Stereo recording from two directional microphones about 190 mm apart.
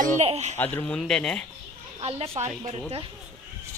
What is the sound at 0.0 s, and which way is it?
Speech, 35° right (ahead or behind).